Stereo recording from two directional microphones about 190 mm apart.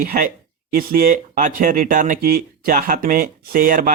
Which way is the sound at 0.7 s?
50° right (ahead or behind).